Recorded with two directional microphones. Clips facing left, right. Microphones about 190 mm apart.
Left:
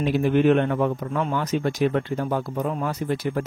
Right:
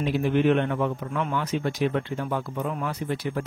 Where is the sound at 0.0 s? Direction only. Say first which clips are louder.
Left 3 dB; 50° left (ahead or behind).